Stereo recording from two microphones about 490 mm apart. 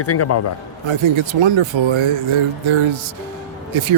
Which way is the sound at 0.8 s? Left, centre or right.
Right.